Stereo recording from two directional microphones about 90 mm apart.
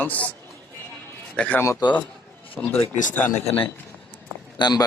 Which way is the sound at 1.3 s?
15° left (ahead or behind).